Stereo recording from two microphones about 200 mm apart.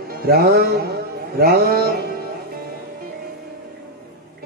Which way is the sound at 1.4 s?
50° right (ahead or behind).